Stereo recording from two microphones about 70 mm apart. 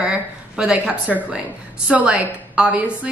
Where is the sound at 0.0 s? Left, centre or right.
Centre.